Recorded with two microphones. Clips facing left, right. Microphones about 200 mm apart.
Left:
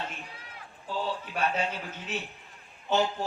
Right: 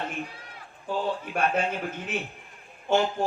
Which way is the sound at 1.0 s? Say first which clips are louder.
Right 3 dB; 55° right (ahead or behind).